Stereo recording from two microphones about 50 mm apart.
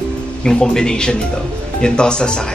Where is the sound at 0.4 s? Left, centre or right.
Centre.